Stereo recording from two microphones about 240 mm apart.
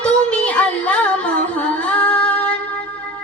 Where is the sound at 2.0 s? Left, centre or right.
Centre.